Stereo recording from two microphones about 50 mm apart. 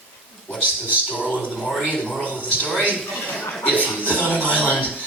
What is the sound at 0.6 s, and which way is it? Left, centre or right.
Speech, left.